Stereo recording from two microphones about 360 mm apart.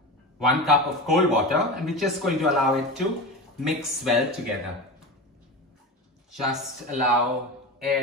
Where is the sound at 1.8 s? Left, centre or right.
Centre.